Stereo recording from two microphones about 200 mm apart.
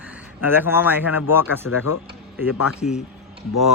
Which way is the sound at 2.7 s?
35° left (ahead or behind).